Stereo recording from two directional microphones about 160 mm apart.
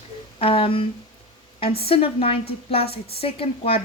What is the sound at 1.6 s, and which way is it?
A woman's voice, 40° left (ahead or behind).